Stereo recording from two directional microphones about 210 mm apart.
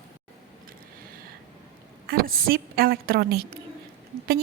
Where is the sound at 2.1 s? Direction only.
45° right (ahead or behind).